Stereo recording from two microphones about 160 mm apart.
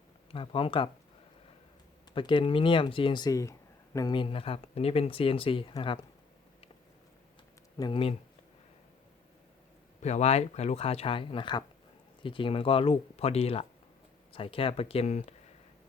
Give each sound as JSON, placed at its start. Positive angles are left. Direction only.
{"t": 0.3, "sound": "speech", "side_deg": 35}
{"t": 2.1, "sound": "speech", "side_deg": 30}
{"t": 7.8, "sound": "speech", "side_deg": 30}
{"t": 10.0, "sound": "speech", "side_deg": 45}